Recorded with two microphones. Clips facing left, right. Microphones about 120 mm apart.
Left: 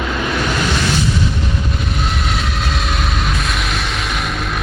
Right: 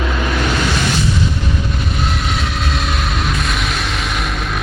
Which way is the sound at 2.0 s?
Centre (ahead or behind).